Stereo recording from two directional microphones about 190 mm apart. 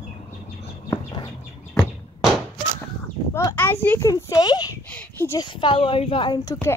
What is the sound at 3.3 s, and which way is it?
Speech, 10° left (ahead or behind).